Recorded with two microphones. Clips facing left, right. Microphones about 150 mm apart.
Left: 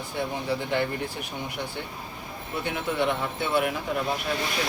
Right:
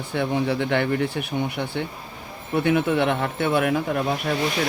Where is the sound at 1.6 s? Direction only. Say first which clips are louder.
Right 6 dB; 60° right (ahead or behind).